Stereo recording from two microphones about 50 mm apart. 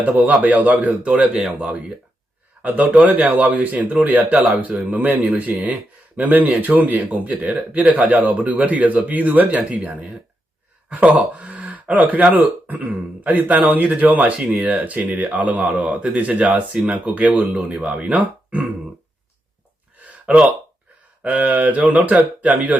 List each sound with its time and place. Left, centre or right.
0.0 s speech: right
20.1 s a sound: right
21.2 s speech: right